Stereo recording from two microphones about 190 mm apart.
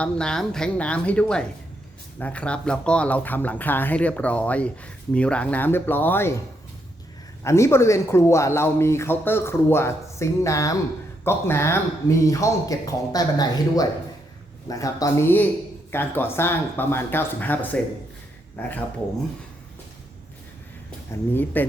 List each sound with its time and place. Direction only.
0.0 s speech: 5° left (ahead or behind)
7.4 s speech: 15° left (ahead or behind)
21.3 s speech: 10° left (ahead or behind)